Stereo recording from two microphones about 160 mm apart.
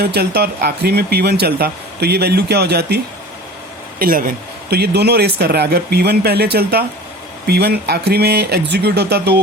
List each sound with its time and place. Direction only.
0.0 s speech: 85° right
3.9 s speech: 65° right (ahead or behind)
4.7 s speech: 85° right